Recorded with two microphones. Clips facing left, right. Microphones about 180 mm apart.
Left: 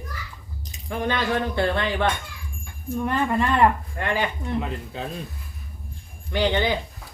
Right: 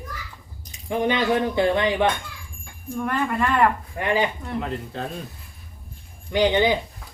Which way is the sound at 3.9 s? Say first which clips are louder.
Right 3 dB; 15° right (ahead or behind).